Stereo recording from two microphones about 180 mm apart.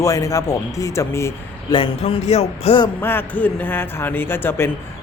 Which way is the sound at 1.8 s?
30° left (ahead or behind).